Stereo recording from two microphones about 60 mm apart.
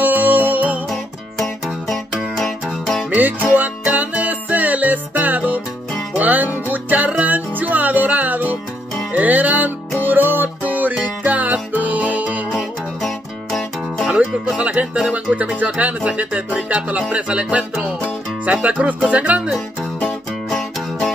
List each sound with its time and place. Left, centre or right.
0.0 s music: right
2.3 s music: centre
3.1 s music: right
13.0 s music: centre
14.0 s music: centre
20.4 s music: centre